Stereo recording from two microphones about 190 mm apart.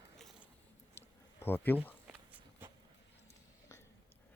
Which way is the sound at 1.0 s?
10° left (ahead or behind).